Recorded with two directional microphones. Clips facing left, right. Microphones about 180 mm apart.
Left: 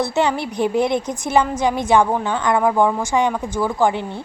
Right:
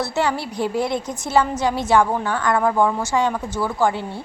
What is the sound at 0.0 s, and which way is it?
A woman's voice, 20° left (ahead or behind).